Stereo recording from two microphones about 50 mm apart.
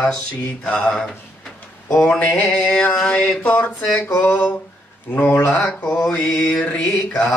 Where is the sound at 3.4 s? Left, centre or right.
Left.